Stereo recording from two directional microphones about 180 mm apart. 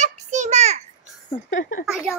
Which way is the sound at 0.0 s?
40° right (ahead or behind).